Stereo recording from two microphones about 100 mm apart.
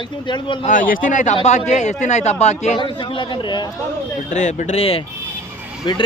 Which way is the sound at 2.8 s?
55° left (ahead or behind).